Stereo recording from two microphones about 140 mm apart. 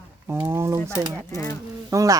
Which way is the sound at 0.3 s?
15° right (ahead or behind).